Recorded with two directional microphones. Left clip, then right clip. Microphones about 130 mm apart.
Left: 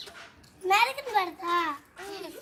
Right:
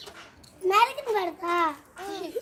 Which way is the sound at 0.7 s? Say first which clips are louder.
Right 2 dB; 45° left (ahead or behind).